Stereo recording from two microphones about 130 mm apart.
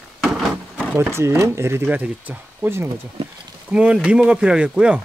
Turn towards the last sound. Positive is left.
turn(degrees=-10)  # may be behind; listen again after turning